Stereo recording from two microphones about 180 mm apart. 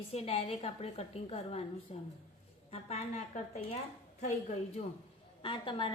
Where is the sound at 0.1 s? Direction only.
35° left (ahead or behind).